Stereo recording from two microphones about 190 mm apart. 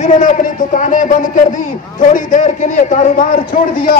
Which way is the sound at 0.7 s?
40° left (ahead or behind).